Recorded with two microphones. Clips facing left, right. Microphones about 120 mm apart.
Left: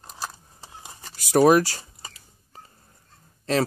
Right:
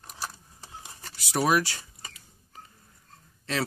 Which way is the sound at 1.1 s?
45° left (ahead or behind).